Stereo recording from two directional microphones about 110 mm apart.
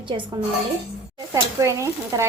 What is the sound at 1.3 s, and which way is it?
Stir, 30° right (ahead or behind).